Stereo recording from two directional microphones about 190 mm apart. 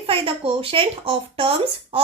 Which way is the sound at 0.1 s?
30° right (ahead or behind).